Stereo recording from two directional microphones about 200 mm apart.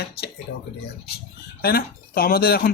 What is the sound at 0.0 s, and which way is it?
Speech, 55° left (ahead or behind).